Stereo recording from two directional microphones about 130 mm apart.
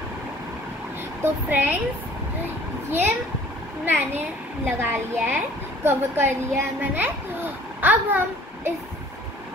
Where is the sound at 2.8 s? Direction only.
15° right (ahead or behind).